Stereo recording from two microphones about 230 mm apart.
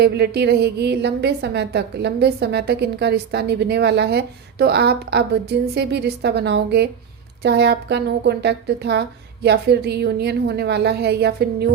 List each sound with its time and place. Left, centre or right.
0.0 s a woman's voice: right